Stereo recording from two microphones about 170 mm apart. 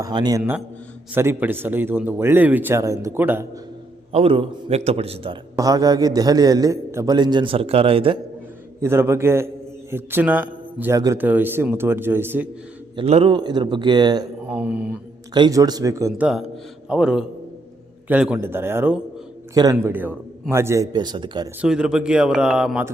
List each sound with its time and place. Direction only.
0.0 s a man's voice: 25° right (ahead or behind)
4.1 s a man's voice: 35° right (ahead or behind)
5.5 s a man's voice: 20° right (ahead or behind)
8.8 s a man's voice: 15° right (ahead or behind)
13.0 s a man's voice: 35° right (ahead or behind)
14.4 s a man's voice: 5° right (ahead or behind)
15.3 s a man's voice: 25° right (ahead or behind)
16.2 s a man's voice: centre (ahead or behind); by 21.5 s 25° right (ahead or behind)
21.6 s speech: 5° right (ahead or behind)